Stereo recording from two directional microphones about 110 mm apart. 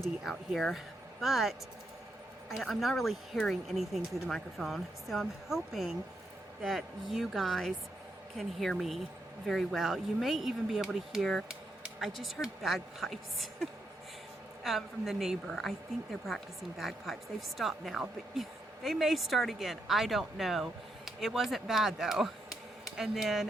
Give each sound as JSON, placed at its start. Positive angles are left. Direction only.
{"t": 0.0, "sound": "a woman's voice", "side_deg": 0}